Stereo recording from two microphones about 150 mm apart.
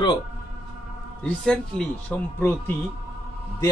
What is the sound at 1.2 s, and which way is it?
Speech, 5° left (ahead or behind).